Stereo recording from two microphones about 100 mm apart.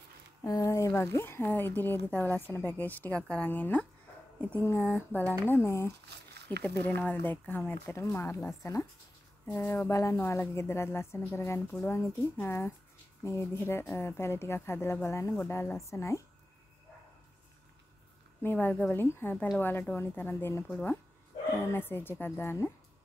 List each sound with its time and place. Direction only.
0.4 s speech: 35° left (ahead or behind)
6.6 s speech: 15° left (ahead or behind)
18.4 s speech: 20° left (ahead or behind)
21.7 s speech: 20° left (ahead or behind)